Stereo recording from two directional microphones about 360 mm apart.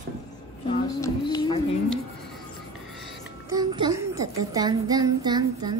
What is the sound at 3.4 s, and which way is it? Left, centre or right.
A child's voice, centre.